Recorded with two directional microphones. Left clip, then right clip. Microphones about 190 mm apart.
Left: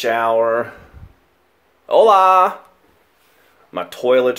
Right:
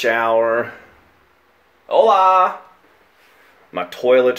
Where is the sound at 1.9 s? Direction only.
45° left (ahead or behind).